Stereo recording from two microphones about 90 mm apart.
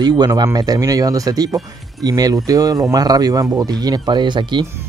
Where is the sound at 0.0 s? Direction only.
50° right (ahead or behind).